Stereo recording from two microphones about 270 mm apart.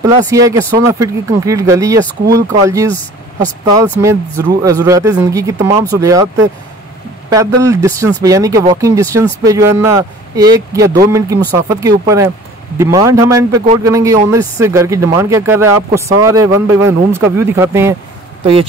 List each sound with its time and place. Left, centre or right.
0.0 s speech: centre
18.4 s speech: right